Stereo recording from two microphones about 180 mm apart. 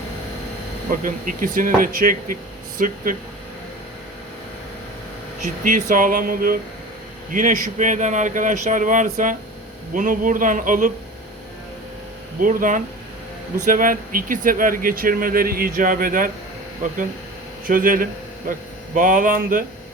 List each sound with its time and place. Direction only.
0.9 s speech: 50° right (ahead or behind)
5.4 s speech: 45° right (ahead or behind)
12.4 s speech: 50° right (ahead or behind)
17.7 s a man's voice: 50° right (ahead or behind)